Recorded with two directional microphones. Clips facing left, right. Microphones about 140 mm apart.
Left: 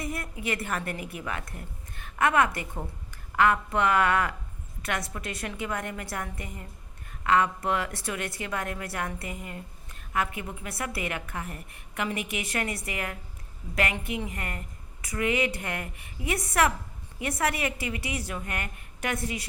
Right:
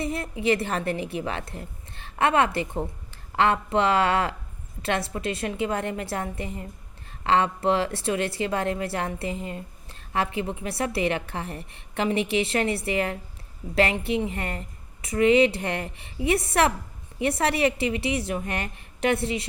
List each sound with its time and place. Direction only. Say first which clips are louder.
0.0 s a woman's voice: right 7 dB; 25° right (ahead or behind)